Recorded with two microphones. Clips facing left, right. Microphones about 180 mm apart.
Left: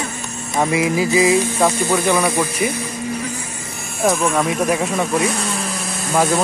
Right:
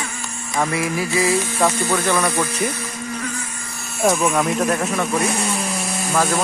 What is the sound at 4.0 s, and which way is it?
Speech, centre (ahead or behind).